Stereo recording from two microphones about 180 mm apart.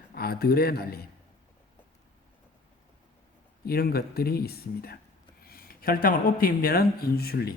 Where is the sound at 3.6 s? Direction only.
60° left (ahead or behind).